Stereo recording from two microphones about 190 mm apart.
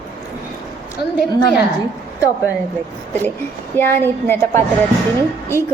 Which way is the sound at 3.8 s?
10° left (ahead or behind).